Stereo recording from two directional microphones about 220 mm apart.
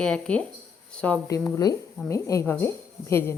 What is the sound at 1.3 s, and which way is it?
A woman's voice, 15° left (ahead or behind).